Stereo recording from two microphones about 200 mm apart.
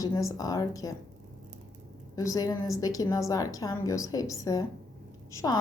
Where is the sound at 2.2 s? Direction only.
15° left (ahead or behind).